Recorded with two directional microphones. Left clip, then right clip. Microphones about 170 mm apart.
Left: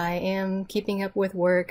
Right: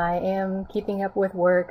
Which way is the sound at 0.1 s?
35° left (ahead or behind).